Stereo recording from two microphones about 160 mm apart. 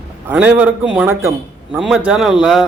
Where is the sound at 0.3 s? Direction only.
10° right (ahead or behind).